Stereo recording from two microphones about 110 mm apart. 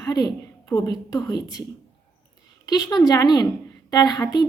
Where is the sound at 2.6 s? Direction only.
35° left (ahead or behind).